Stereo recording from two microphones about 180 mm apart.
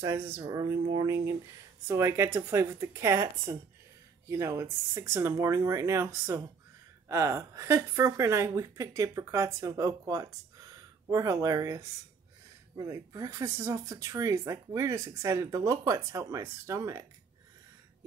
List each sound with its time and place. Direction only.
0.0 s speech: 15° right (ahead or behind)